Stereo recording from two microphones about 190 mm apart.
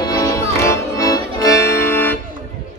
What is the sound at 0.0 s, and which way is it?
Music, 20° left (ahead or behind).